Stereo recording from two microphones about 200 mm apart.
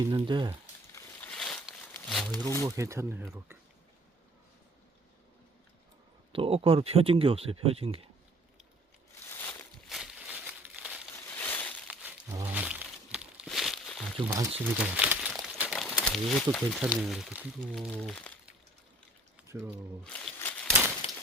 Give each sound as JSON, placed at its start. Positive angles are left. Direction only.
{"t": 0.2, "sound": "speech", "side_deg": -25}
{"t": 0.9, "sound": "wild animals", "side_deg": 5}
{"t": 2.6, "sound": "speech", "side_deg": -15}
{"t": 6.3, "sound": "speech", "side_deg": -25}
{"t": 9.2, "sound": "crumpling", "side_deg": 10}
{"t": 11.3, "sound": "crushing", "side_deg": 10}
{"t": 11.9, "sound": "a sound", "side_deg": -10}
{"t": 14.3, "sound": "speech", "side_deg": -15}
{"t": 14.6, "sound": "crumpling", "side_deg": -5}
{"t": 15.9, "sound": "speech", "side_deg": 5}
{"t": 20.1, "sound": "a sound", "side_deg": 5}
{"t": 21.0, "sound": "a sound", "side_deg": 30}